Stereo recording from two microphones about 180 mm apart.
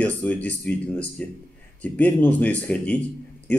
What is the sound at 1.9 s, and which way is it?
Speech, 10° left (ahead or behind).